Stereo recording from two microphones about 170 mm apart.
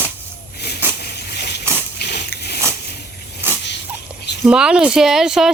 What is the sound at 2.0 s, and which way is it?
Biting, 75° left (ahead or behind).